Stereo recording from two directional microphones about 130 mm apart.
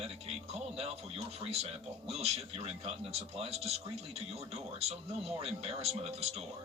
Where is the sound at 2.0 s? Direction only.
55° right (ahead or behind).